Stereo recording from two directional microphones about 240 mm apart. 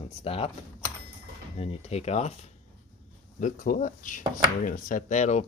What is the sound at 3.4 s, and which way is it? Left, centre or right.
Speech, left.